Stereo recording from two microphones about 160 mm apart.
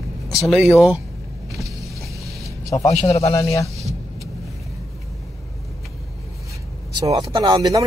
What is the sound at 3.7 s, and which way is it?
Vehicle, 20° right (ahead or behind).